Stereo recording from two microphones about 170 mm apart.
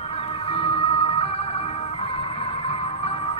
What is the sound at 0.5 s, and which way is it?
Music, 30° left (ahead or behind).